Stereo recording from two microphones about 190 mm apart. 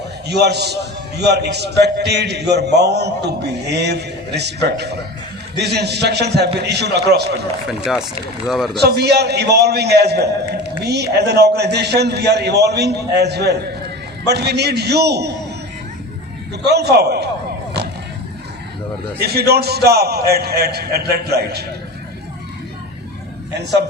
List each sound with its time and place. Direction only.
0.3 s a man's voice: 60° right (ahead or behind)
7.7 s speech: centre (ahead or behind)
8.8 s a man's voice: 60° right (ahead or behind)
16.6 s a man's voice: 60° right (ahead or behind)
19.2 s a man's voice: 55° right (ahead or behind)